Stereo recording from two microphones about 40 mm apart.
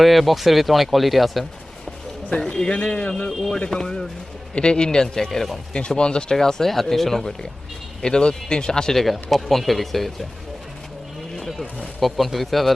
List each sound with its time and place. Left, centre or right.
0.0 s speech: centre
2.4 s speech: centre
2.7 s speech: left
3.7 s speech: centre
4.5 s speech: left
6.3 s speech: centre
9.0 s speech: centre
11.3 s a sound: centre
11.9 s speech: centre